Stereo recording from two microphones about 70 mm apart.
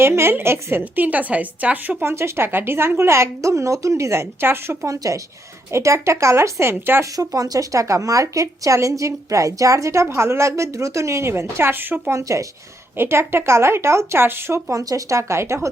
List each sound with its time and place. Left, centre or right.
0.0 s a woman's voice: right
2.0 s a woman's voice: right
4.9 s speech: right
7.0 s speech: right
12.1 s speech: right
13.0 s a woman's voice: right
14.7 s speech: right